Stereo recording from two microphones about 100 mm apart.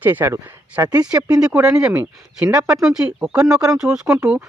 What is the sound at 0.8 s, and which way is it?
Speech, 40° right (ahead or behind).